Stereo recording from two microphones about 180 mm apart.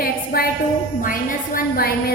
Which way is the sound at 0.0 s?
55° left (ahead or behind).